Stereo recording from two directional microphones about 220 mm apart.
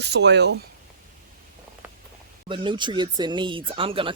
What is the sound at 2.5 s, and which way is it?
Speech, 20° right (ahead or behind).